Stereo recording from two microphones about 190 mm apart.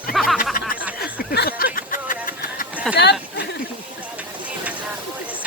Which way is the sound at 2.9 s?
60° left (ahead or behind).